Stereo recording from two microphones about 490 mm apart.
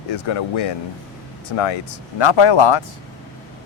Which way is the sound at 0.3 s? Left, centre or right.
Left.